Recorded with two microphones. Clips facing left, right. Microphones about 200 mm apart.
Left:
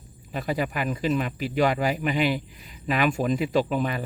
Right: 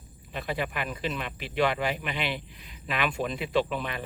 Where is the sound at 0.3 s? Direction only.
40° left (ahead or behind).